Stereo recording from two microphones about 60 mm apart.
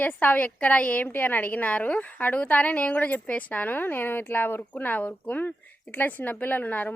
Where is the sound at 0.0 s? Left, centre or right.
Left.